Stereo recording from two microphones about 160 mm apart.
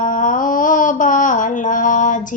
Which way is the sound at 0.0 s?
55° left (ahead or behind).